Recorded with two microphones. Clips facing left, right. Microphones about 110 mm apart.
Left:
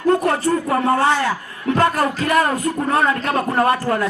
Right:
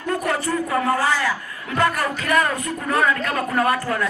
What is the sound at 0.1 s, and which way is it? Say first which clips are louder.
A man's voice: left 6 dB; 30° left (ahead or behind).